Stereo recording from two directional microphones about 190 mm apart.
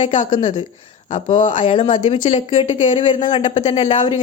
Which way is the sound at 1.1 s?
40° left (ahead or behind).